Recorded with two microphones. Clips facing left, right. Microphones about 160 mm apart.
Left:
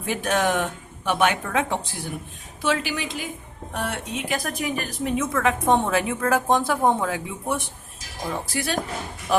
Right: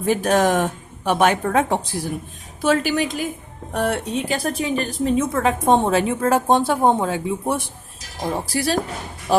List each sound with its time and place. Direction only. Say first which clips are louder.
0.0 s a woman's voice: right 6 dB; 40° right (ahead or behind)